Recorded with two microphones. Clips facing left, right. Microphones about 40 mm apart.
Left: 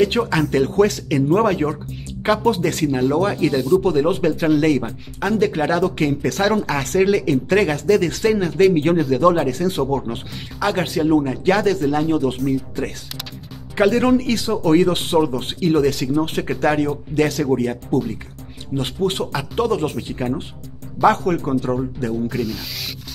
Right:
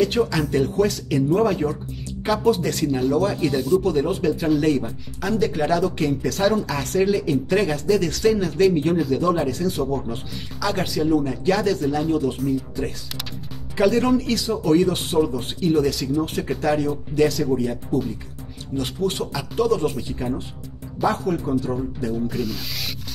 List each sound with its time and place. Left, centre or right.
0.0 s speech: left
8.7 s speech: left
18.8 s speech: left
21.0 s speech: left
22.3 s rub: centre